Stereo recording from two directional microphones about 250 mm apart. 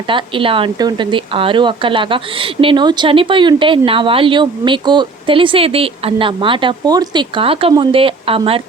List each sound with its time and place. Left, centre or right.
0.1 s a woman's voice: centre